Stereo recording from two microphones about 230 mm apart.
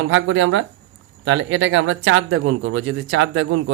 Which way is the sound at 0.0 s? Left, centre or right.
Right.